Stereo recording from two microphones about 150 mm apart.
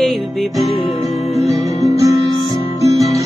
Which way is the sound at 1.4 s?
45° left (ahead or behind).